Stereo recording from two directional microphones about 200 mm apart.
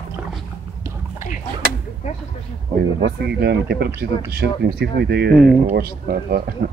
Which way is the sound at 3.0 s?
55° right (ahead or behind).